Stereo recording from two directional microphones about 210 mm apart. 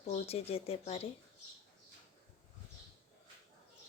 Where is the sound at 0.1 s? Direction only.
30° left (ahead or behind).